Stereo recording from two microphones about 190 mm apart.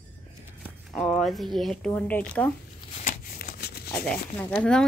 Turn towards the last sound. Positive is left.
turn(degrees=5)  # may be behind; listen again after turning